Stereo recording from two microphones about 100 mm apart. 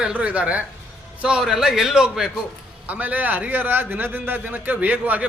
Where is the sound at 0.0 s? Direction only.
10° right (ahead or behind).